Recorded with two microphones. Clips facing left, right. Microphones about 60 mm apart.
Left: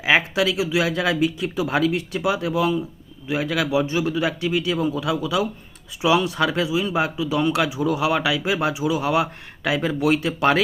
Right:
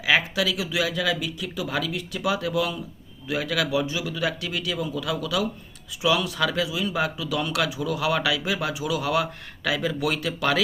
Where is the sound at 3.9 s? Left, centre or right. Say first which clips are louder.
Left 5 dB; left.